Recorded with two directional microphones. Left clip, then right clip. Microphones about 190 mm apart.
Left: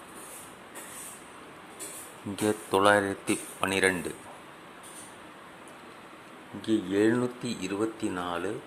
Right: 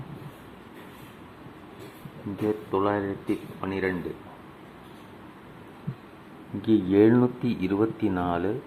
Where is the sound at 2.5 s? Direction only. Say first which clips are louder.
Left 3 dB; 35° left (ahead or behind).